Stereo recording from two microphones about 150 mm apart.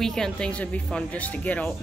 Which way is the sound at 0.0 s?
5° left (ahead or behind).